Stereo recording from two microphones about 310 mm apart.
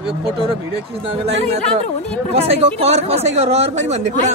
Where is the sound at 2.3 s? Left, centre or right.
Centre.